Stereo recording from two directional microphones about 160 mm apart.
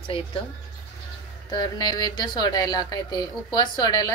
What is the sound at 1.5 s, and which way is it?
A woman's voice, 25° left (ahead or behind).